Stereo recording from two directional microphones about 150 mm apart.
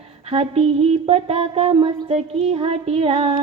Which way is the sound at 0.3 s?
40° right (ahead or behind).